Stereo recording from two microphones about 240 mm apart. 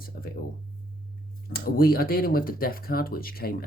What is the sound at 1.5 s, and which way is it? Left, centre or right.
Speech, left.